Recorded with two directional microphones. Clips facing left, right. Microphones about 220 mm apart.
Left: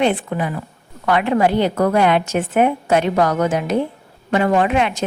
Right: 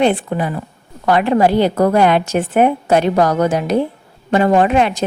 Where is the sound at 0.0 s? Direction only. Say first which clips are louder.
Right 3 dB; 35° right (ahead or behind).